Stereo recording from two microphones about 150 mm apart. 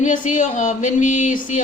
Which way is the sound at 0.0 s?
55° left (ahead or behind).